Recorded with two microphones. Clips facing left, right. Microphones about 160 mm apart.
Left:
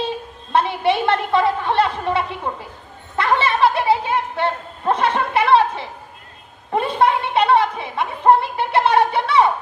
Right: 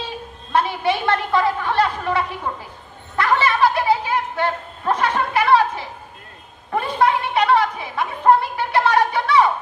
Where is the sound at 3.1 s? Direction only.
25° left (ahead or behind).